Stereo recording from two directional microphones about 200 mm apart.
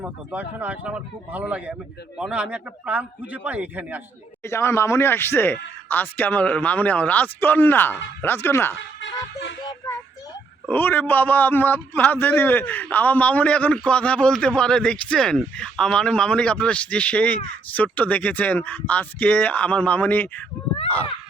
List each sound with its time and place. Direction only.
0.0 s a man's voice: 10° right (ahead or behind)
4.4 s a man's voice: 15° left (ahead or behind)
9.0 s music: 65° left (ahead or behind)
10.7 s a man's voice: 10° left (ahead or behind)